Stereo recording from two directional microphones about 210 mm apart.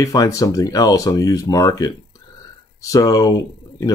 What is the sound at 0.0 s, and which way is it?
Speech, 15° left (ahead or behind).